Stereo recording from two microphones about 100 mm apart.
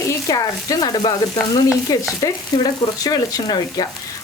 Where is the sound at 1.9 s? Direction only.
35° left (ahead or behind).